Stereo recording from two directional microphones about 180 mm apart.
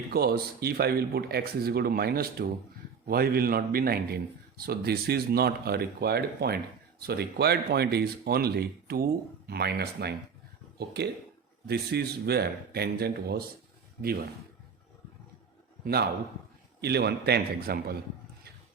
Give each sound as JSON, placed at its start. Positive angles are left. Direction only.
{"t": 0.1, "sound": "a man's voice", "side_deg": -60}
{"t": 15.8, "sound": "a man's voice", "side_deg": -60}